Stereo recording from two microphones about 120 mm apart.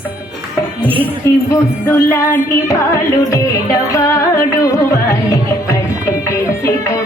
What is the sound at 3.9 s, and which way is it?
Music, 25° left (ahead or behind).